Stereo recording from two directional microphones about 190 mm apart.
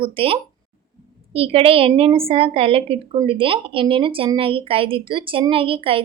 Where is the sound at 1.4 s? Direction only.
30° right (ahead or behind).